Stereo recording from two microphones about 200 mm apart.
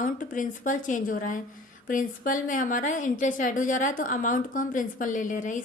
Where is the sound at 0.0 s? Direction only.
40° left (ahead or behind).